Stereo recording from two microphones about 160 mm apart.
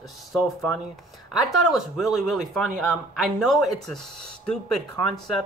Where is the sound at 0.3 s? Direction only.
Centre (ahead or behind).